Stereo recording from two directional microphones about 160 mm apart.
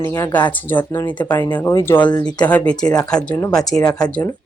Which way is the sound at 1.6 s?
15° left (ahead or behind).